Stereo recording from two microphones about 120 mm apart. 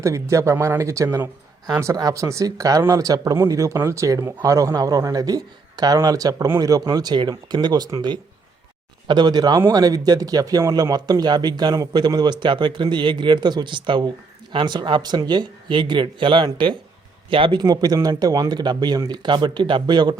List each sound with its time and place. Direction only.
0.0 s speech: 25° right (ahead or behind)